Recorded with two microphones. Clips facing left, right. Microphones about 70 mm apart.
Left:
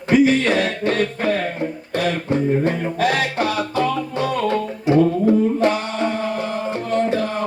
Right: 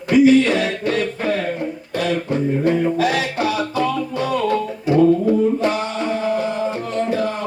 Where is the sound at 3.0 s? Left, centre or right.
Left.